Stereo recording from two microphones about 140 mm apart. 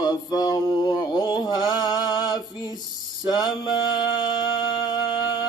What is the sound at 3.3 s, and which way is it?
Mantra, 30° left (ahead or behind).